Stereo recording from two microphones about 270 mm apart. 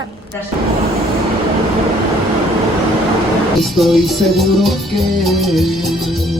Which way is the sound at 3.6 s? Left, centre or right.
Centre.